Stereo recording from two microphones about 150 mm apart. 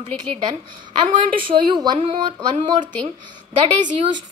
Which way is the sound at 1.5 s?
30° right (ahead or behind).